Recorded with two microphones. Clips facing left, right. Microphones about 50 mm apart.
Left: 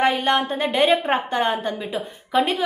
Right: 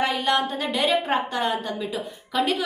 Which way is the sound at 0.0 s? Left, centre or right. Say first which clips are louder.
Left 3 dB; left.